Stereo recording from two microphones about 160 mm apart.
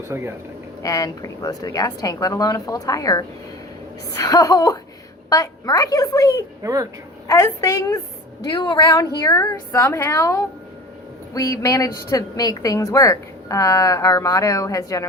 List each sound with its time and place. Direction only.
0.1 s speech: 15° right (ahead or behind)
0.8 s a woman's voice: 20° left (ahead or behind)
6.6 s speech: 20° right (ahead or behind)
7.3 s a woman's voice: 20° left (ahead or behind)